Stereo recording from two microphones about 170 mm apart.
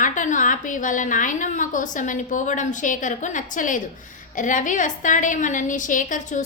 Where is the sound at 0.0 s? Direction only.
50° left (ahead or behind).